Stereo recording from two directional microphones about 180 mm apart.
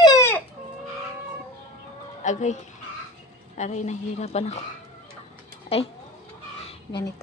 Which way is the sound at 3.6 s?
40° left (ahead or behind).